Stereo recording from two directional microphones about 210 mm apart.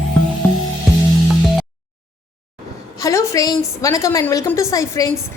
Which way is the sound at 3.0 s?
15° left (ahead or behind).